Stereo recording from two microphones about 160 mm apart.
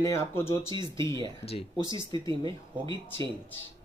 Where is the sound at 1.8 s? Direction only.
30° right (ahead or behind).